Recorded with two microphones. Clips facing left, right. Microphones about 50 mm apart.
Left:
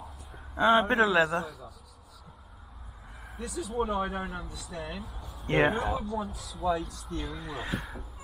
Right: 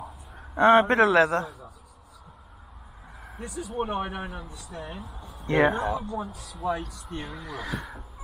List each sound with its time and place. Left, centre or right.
0.0 s a sound: right
3.4 s speech: left
3.7 s speech: right
4.6 s speech: left
5.3 s speech: right
7.2 s speech: right